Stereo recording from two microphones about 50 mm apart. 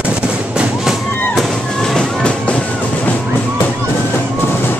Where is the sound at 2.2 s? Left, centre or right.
Left.